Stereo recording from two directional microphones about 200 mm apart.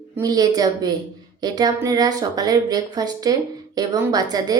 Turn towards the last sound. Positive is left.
turn(degrees=-20)  # may be behind; listen again after turning